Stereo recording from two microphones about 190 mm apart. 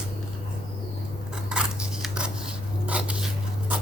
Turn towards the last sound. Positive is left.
turn(degrees=-5)  # may be behind; listen again after turning